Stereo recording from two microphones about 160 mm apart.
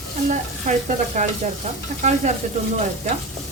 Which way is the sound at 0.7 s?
45° right (ahead or behind).